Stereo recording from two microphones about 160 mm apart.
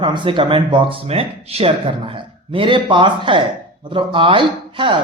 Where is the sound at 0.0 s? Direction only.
30° right (ahead or behind).